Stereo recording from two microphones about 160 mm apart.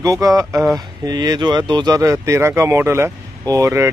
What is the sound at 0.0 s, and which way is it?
Speech, 20° right (ahead or behind).